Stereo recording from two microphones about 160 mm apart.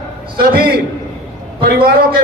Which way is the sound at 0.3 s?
70° right (ahead or behind).